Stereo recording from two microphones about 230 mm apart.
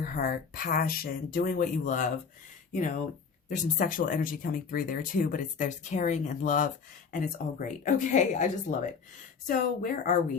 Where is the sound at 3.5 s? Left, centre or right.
Left.